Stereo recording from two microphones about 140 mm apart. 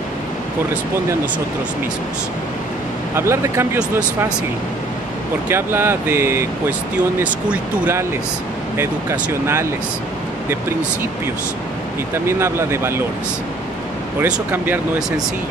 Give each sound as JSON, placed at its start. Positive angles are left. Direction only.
{"t": 3.2, "sound": "speech", "side_deg": -20}
{"t": 5.5, "sound": "speech", "side_deg": -15}
{"t": 12.3, "sound": "speech", "side_deg": -20}
{"t": 14.2, "sound": "speech", "side_deg": -10}